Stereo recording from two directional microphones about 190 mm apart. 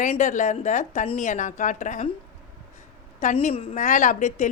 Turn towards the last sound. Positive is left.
turn(degrees=40)  # may be behind; listen again after turning